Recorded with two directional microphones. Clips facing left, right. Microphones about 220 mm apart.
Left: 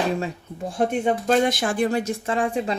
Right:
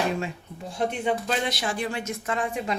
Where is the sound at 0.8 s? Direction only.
50° left (ahead or behind).